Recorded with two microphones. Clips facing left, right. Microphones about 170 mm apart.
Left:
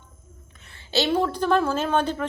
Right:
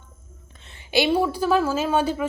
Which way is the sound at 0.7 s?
15° right (ahead or behind).